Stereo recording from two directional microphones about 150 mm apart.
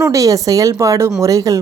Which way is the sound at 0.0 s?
20° right (ahead or behind).